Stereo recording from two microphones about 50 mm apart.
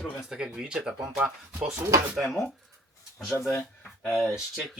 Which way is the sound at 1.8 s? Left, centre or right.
Right.